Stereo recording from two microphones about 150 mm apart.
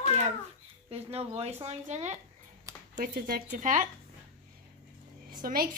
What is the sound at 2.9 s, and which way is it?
Speech, 75° right (ahead or behind).